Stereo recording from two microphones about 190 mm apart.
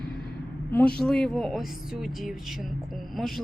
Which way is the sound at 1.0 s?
5° left (ahead or behind).